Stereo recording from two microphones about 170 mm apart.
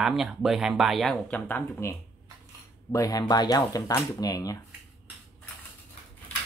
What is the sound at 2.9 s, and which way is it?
Speech, 20° left (ahead or behind).